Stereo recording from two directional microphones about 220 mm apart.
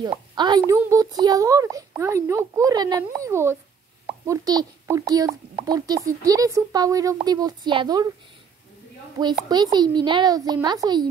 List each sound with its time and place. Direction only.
0.4 s a woman's voice: 20° right (ahead or behind)
9.2 s speech: 20° right (ahead or behind)